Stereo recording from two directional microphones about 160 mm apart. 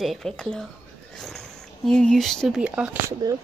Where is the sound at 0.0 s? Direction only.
Centre (ahead or behind).